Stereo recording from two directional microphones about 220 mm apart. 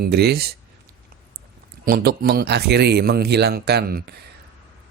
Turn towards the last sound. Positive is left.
turn(degrees=-45)  # may be behind; listen again after turning